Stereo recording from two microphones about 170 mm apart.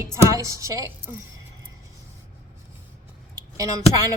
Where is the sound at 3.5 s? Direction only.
20° right (ahead or behind).